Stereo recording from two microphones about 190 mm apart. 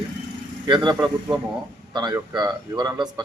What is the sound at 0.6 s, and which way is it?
Speech, 20° right (ahead or behind).